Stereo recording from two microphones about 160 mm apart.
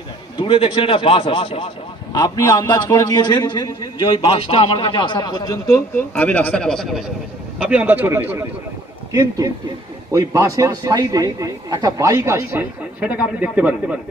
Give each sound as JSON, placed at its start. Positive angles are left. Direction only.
{"t": 0.4, "sound": "a man's voice", "side_deg": 35}
{"t": 2.1, "sound": "a man's voice", "side_deg": 20}
{"t": 6.1, "sound": "a man's voice", "side_deg": 10}
{"t": 7.5, "sound": "a man's voice", "side_deg": -10}